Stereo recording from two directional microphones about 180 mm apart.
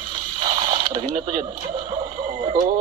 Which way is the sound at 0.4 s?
25° right (ahead or behind).